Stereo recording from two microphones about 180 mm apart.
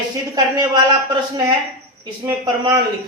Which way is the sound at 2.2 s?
20° right (ahead or behind).